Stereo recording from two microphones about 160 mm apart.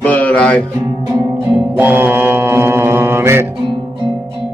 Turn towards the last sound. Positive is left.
turn(degrees=-15)  # may be behind; listen again after turning